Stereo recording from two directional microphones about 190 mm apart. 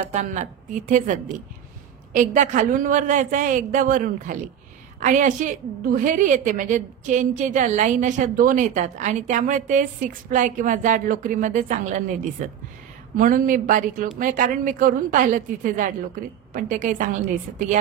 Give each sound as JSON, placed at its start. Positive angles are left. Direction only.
{"t": 0.1, "sound": "a woman's voice", "side_deg": -40}